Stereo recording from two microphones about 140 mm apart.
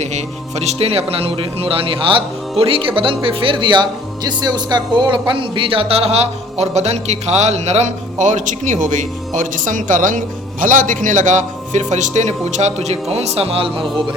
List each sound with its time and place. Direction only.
0.0 s a man's voice: 55° right (ahead or behind)